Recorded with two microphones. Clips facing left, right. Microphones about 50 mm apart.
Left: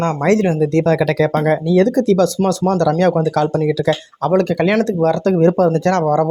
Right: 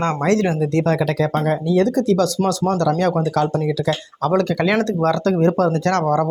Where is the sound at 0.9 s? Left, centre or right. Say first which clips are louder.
Left 4 dB; left.